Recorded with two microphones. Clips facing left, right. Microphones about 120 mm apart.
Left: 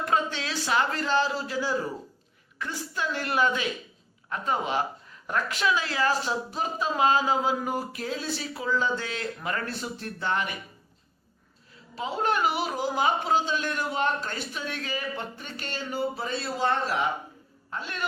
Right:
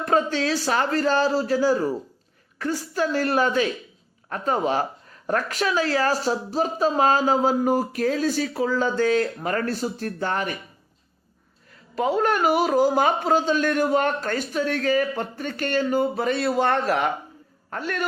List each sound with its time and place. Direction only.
0.0 s speech: 40° right (ahead or behind)
11.9 s speech: 50° right (ahead or behind)
16.2 s a man's voice: 65° right (ahead or behind)
17.7 s a man's voice: 50° right (ahead or behind)